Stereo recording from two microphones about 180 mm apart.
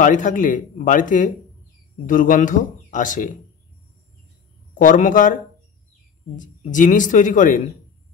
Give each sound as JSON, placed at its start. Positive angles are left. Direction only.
{"t": 0.0, "sound": "speech", "side_deg": 45}
{"t": 4.7, "sound": "speech", "side_deg": 45}